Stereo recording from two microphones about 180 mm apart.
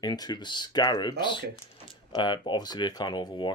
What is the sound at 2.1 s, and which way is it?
Speech, 25° left (ahead or behind).